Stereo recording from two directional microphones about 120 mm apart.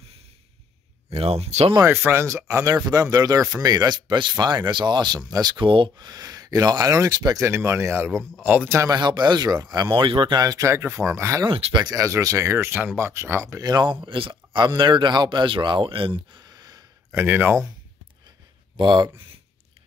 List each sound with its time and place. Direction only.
1.1 s speech: 60° right (ahead or behind)
1.9 s speech: 20° right (ahead or behind)
7.4 s speech: 20° right (ahead or behind)
8.9 s speech: 35° right (ahead or behind)
10.4 s speech: 30° right (ahead or behind)
11.4 s speech: 40° right (ahead or behind)
17.2 s speech: 15° right (ahead or behind)
18.8 s speech: 40° right (ahead or behind)